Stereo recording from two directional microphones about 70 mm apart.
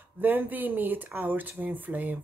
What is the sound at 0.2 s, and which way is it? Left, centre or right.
Speech, right.